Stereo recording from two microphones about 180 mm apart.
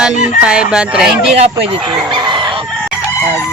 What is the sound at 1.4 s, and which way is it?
Speech, 35° right (ahead or behind).